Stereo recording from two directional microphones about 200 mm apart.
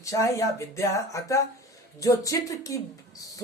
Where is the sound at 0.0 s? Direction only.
15° left (ahead or behind).